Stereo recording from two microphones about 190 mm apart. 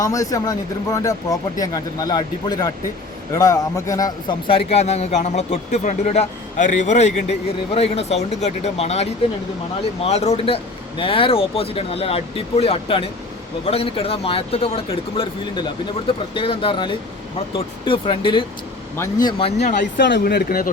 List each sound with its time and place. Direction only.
0.0 s a man's voice: 20° left (ahead or behind)
16.3 s speech: 30° left (ahead or behind)
18.9 s speech: 15° left (ahead or behind)
19.4 s a man's voice: 30° left (ahead or behind)
19.8 s speech: 65° left (ahead or behind)